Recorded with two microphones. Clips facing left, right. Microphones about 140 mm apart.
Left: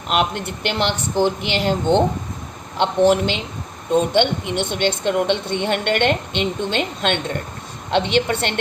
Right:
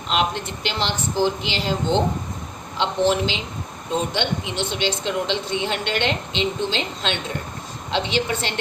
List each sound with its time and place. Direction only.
0.1 s a woman's voice: 55° left (ahead or behind)